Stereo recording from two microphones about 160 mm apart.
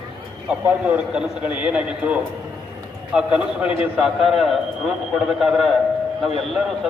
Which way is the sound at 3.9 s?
Centre (ahead or behind).